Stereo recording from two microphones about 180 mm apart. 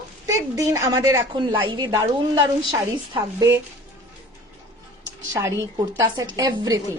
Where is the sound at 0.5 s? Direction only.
15° right (ahead or behind).